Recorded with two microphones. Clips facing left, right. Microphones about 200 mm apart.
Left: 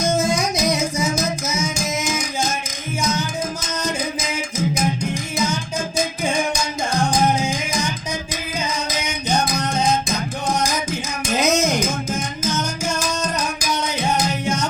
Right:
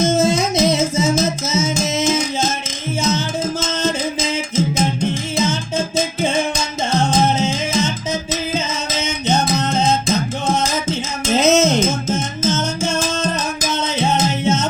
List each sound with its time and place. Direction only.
0.0 s music: 25° right (ahead or behind)